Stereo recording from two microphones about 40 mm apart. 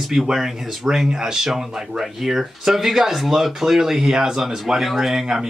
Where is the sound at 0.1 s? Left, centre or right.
Centre.